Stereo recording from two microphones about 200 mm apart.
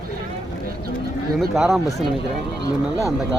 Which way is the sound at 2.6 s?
15° left (ahead or behind).